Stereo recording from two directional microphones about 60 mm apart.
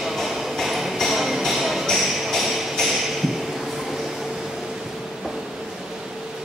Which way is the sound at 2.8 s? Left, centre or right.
Centre.